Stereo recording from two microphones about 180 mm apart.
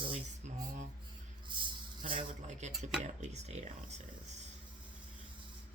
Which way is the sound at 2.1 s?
40° right (ahead or behind).